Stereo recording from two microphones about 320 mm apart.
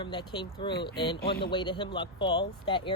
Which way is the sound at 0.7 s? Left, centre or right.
Left.